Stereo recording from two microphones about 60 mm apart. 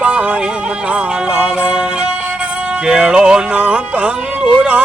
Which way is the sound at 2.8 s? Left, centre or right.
Centre.